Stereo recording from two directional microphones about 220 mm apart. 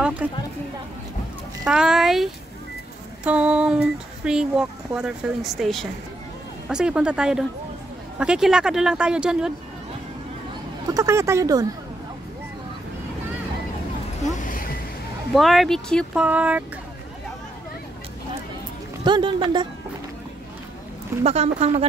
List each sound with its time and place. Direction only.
0.2 s a sound: 5° right (ahead or behind)
1.7 s speech: 5° right (ahead or behind)
10.9 s speech: 15° right (ahead or behind)
14.2 s music: 35° left (ahead or behind)
15.3 s speech: centre (ahead or behind)
19.0 s speech: 20° right (ahead or behind)
21.2 s speech: 30° right (ahead or behind)